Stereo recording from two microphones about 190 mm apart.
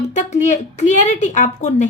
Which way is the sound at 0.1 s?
40° left (ahead or behind).